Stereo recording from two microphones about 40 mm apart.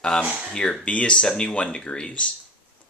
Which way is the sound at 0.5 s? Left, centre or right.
Centre.